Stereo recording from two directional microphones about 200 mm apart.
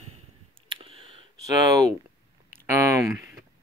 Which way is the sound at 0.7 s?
25° right (ahead or behind).